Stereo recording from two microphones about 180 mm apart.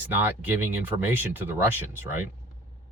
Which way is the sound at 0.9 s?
10° right (ahead or behind).